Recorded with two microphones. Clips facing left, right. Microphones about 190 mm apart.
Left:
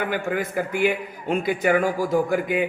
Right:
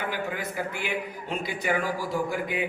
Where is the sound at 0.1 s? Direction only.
50° left (ahead or behind).